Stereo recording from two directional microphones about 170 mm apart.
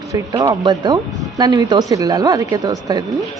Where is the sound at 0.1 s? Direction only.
20° right (ahead or behind).